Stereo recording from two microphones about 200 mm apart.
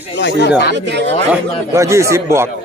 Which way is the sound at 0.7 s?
60° right (ahead or behind).